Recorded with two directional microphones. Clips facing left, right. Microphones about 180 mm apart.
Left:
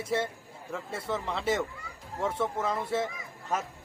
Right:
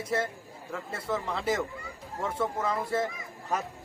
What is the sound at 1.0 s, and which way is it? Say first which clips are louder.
Speech: right 1 dB; centre (ahead or behind).